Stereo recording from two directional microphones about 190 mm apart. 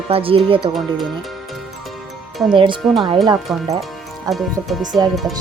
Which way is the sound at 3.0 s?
25° right (ahead or behind).